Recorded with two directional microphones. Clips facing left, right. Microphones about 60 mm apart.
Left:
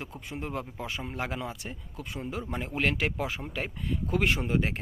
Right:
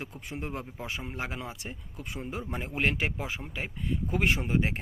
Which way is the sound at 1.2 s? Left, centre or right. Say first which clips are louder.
Left 2 dB; centre.